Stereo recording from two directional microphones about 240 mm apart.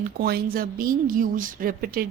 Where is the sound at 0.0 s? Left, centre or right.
Right.